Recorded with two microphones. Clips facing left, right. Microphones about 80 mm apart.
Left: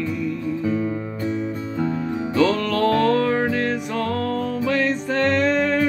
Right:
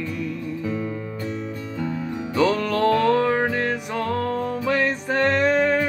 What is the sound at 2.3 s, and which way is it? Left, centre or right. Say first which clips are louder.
Music: left 1 dB; right.